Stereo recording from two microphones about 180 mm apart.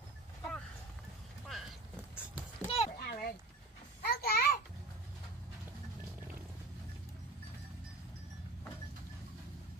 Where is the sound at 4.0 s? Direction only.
60° left (ahead or behind).